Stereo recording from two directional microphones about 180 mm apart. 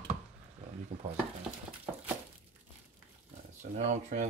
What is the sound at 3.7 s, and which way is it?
Speech, 40° right (ahead or behind).